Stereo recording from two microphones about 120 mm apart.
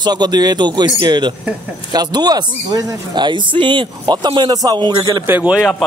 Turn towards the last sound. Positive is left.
turn(degrees=-15)  # may be behind; listen again after turning